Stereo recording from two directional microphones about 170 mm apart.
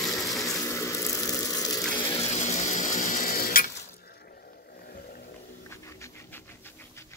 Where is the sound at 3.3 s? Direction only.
60° left (ahead or behind).